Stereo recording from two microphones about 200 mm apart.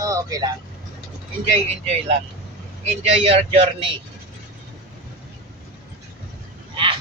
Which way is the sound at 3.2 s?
30° right (ahead or behind).